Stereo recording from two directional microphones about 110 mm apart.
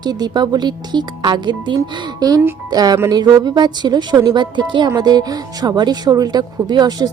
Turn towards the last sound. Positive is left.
turn(degrees=-40)  # may be behind; listen again after turning